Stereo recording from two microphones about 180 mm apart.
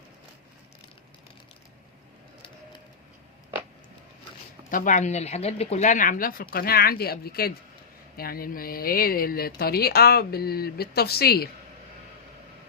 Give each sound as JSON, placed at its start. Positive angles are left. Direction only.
{"t": 4.7, "sound": "speech", "side_deg": 45}